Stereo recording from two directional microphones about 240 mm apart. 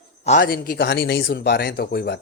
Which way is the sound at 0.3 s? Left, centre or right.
Left.